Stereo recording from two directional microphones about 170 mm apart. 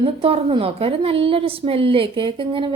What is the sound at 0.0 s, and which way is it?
A woman's voice, 35° right (ahead or behind).